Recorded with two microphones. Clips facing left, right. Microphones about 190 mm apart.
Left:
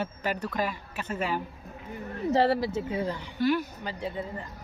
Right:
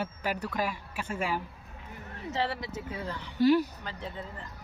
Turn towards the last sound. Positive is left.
turn(degrees=10)  # may be behind; listen again after turning